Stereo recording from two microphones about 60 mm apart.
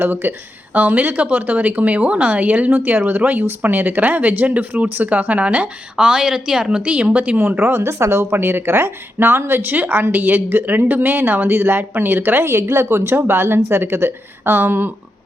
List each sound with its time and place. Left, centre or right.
0.0 s speech: right
6.1 s speech: centre
7.3 s speech: right